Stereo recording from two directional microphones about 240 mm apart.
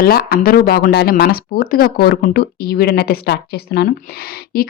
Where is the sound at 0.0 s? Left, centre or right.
Left.